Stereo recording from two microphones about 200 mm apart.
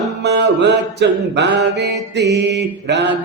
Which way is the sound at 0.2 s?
60° right (ahead or behind).